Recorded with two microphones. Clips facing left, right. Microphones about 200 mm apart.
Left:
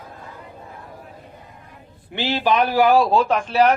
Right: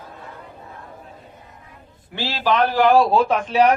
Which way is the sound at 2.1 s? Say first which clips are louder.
Left 1 dB; 20° left (ahead or behind).